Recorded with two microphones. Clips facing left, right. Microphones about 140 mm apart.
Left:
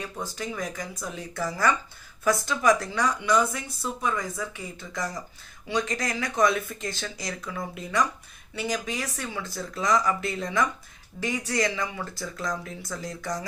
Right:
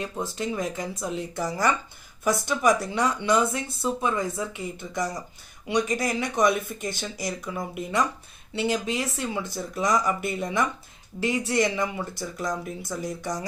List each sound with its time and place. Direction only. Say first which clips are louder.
0.0 s speech: right 4 dB; 25° right (ahead or behind)